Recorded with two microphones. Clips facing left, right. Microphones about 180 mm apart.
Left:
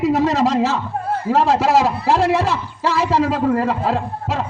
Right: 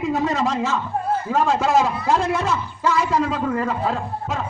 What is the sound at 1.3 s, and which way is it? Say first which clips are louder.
Music: left 5 dB; 75° left (ahead or behind).